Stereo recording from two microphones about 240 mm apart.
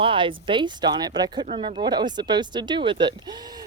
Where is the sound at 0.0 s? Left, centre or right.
Right.